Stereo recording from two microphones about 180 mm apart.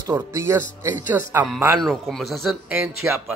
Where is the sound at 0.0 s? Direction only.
20° right (ahead or behind).